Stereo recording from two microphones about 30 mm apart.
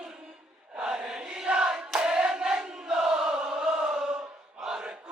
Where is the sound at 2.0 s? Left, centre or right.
Right.